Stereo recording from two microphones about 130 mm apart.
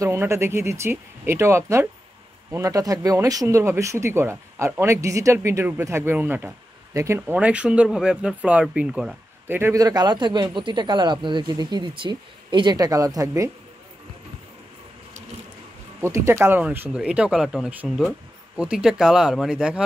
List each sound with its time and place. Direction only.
0.0 s speech: 20° right (ahead or behind); by 9.1 s 5° right (ahead or behind)
9.5 s speech: 20° right (ahead or behind)
16.0 s speech: 20° right (ahead or behind)